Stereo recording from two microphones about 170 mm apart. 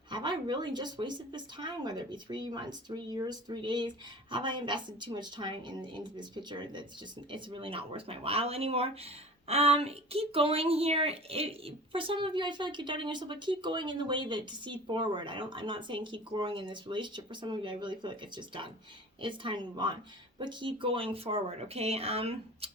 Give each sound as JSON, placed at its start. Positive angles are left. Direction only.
{"t": 0.1, "sound": "speech", "side_deg": -25}